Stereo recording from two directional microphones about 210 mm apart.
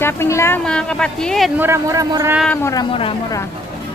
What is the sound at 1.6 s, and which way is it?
Speech, 15° right (ahead or behind).